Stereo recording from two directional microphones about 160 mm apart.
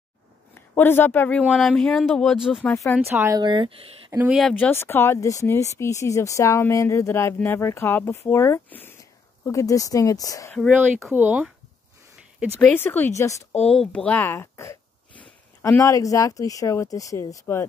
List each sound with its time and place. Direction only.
0.6 s speech: 15° left (ahead or behind)
1.4 s speech: centre (ahead or behind)
2.6 s speech: 15° left (ahead or behind)
3.1 s speech: 15° right (ahead or behind)
4.3 s speech: centre (ahead or behind)
4.6 s speech: 15° left (ahead or behind)
11.1 s speech: 10° right (ahead or behind)
12.6 s speech: 10° left (ahead or behind)
13.7 s speech: 5° left (ahead or behind)